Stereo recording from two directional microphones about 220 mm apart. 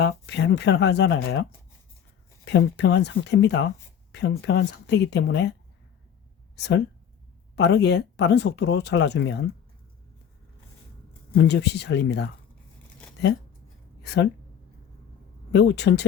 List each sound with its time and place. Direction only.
0.0 s speech: 50° left (ahead or behind)
6.6 s speech: 50° left (ahead or behind)
11.3 s speech: 50° left (ahead or behind)
14.0 s speech: 50° left (ahead or behind)
15.5 s speech: 50° left (ahead or behind)